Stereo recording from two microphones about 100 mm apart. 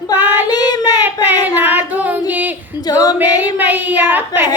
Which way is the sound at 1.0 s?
20° right (ahead or behind).